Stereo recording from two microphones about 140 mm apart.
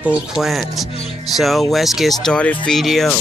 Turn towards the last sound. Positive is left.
turn(degrees=0)  # may be behind; listen again after turning